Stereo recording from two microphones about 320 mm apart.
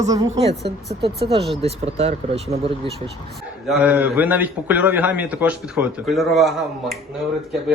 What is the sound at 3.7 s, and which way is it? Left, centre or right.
A man's voice, centre.